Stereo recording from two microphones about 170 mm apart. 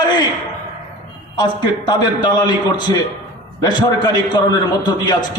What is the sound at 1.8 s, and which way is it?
A man's voice, 25° left (ahead or behind).